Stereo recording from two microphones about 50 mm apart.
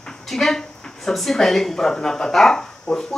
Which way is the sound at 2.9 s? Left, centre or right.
Left.